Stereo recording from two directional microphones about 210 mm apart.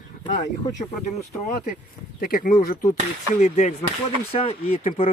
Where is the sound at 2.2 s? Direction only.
40° left (ahead or behind).